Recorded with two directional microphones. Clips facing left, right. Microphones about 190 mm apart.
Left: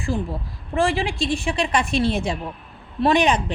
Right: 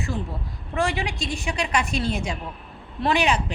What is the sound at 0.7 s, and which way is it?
A woman's voice, 30° left (ahead or behind).